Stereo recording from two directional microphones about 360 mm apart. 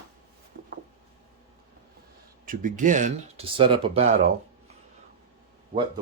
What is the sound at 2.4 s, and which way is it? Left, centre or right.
Speech, right.